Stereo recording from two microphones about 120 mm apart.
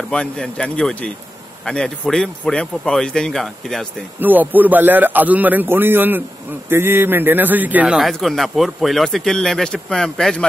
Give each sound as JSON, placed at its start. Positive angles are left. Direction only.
{"t": 0.1, "sound": "a man's voice", "side_deg": 10}
{"t": 4.2, "sound": "a man's voice", "side_deg": -15}